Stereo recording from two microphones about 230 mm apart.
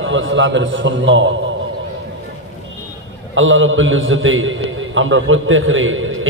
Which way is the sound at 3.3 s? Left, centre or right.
Right.